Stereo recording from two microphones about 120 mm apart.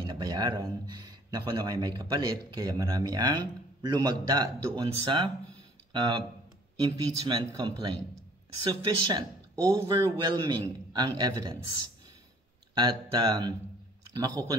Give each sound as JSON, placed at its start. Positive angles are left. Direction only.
{"t": 0.0, "sound": "speech", "side_deg": -35}
{"t": 12.7, "sound": "speech", "side_deg": -40}